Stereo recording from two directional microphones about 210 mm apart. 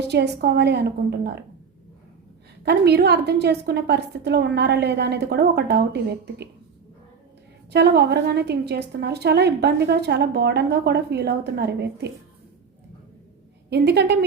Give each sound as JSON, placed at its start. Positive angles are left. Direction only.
{"t": 0.0, "sound": "a woman's voice", "side_deg": -55}
{"t": 2.6, "sound": "a woman's voice", "side_deg": -50}
{"t": 7.7, "sound": "a woman's voice", "side_deg": -50}
{"t": 13.7, "sound": "a woman's voice", "side_deg": -50}